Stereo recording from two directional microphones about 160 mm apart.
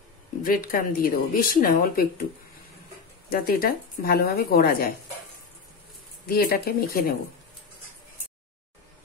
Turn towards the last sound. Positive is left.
turn(degrees=65)  # may be behind; listen again after turning